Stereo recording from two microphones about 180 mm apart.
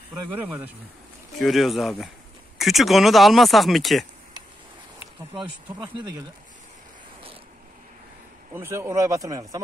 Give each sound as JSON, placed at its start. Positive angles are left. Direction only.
{"t": 0.1, "sound": "speech", "side_deg": -10}
{"t": 5.8, "sound": "speech", "side_deg": -25}
{"t": 8.5, "sound": "speech", "side_deg": -15}